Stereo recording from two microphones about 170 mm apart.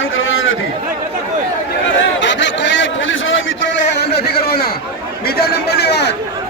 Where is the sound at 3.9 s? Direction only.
70° left (ahead or behind).